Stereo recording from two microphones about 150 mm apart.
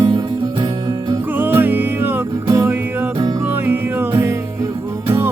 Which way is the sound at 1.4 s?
15° right (ahead or behind).